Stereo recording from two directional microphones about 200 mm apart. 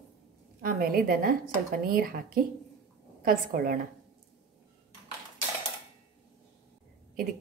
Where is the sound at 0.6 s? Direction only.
45° right (ahead or behind).